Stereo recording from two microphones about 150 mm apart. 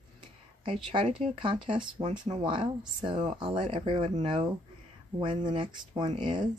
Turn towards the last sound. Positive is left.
turn(degrees=-35)  # may be behind; listen again after turning